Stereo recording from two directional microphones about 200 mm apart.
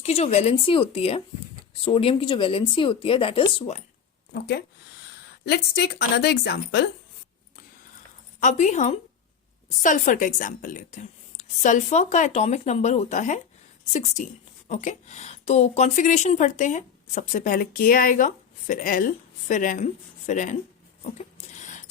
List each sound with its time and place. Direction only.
0.0 s a woman's voice: 30° left (ahead or behind)
5.5 s a woman's voice: 55° left (ahead or behind)
8.4 s a woman's voice: 40° left (ahead or behind)
21.2 s a sound: 35° left (ahead or behind)